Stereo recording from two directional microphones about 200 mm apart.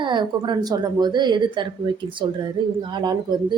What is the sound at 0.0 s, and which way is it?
A woman's voice, 25° right (ahead or behind).